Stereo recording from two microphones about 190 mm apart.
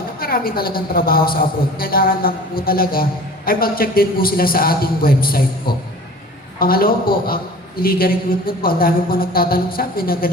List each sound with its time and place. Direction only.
0.2 s a woman's voice: 50° left (ahead or behind)